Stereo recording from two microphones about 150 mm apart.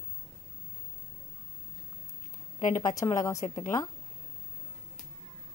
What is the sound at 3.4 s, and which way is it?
Speech, 55° left (ahead or behind).